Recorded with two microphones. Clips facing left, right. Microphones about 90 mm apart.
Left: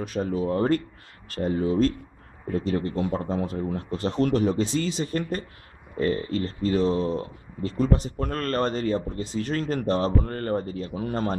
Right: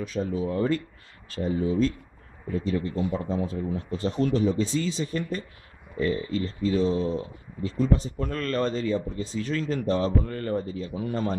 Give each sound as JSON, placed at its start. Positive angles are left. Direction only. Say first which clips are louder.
{"t": 0.0, "sound": "speech", "louder": "left 2 dB", "side_deg": 60}